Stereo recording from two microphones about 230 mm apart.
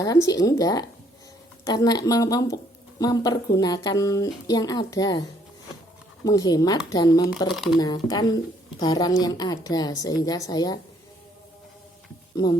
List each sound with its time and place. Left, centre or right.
0.0 s a woman's voice: centre
6.2 s a woman's voice: centre
7.5 s speech: centre
7.8 s a woman's voice: centre